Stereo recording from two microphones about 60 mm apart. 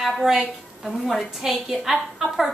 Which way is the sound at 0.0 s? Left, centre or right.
Centre.